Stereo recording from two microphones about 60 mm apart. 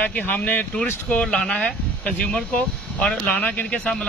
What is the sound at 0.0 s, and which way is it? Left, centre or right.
Speech, left.